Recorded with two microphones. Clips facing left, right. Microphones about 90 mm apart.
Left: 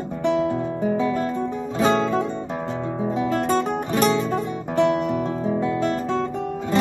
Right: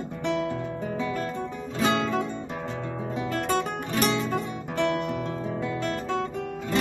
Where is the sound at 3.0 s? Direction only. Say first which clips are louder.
Left 6 dB; 25° left (ahead or behind).